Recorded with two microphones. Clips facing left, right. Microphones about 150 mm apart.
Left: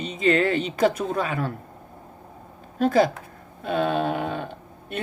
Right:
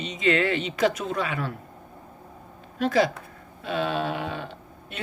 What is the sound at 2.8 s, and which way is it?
Speech, 50° left (ahead or behind).